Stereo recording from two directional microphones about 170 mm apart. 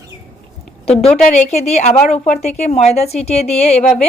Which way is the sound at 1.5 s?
40° left (ahead or behind).